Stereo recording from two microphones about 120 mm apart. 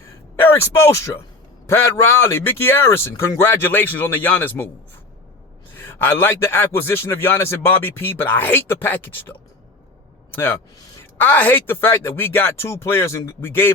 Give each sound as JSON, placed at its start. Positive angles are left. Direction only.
{"t": 0.3, "sound": "speech", "side_deg": 20}
{"t": 6.0, "sound": "speech", "side_deg": 20}
{"t": 10.3, "sound": "speech", "side_deg": 20}